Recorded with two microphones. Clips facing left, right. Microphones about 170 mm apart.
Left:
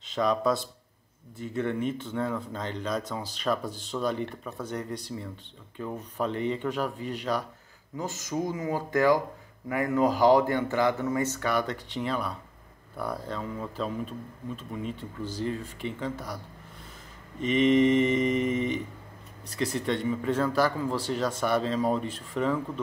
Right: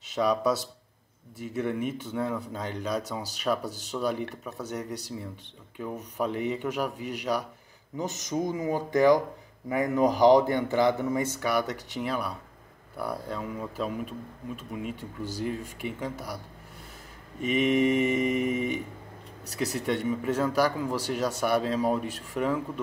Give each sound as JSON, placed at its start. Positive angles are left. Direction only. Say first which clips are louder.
{"t": 0.1, "sound": "speech", "louder": "even", "side_deg": -10}
{"t": 17.4, "sound": "speech", "louder": "left 2 dB", "side_deg": -5}
{"t": 19.9, "sound": "speech", "louder": "right 1 dB", "side_deg": -10}